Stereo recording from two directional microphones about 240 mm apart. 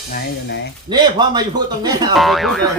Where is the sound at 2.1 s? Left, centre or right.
Centre.